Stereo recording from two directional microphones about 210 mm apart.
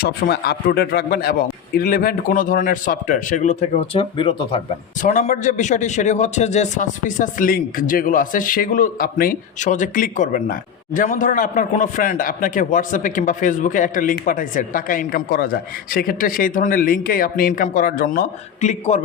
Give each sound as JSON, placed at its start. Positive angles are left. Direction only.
{"t": 0.0, "sound": "a man's voice", "side_deg": 50}
{"t": 5.0, "sound": "a man's voice", "side_deg": 35}